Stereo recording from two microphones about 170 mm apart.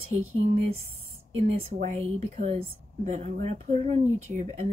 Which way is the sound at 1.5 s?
40° right (ahead or behind).